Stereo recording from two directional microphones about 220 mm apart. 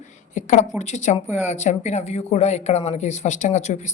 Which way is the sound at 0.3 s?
35° left (ahead or behind).